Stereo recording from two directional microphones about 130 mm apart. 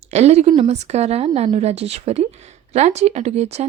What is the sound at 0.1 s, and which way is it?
Speech, 55° right (ahead or behind).